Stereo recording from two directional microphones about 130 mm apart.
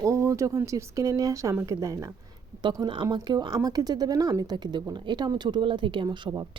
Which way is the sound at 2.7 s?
35° right (ahead or behind).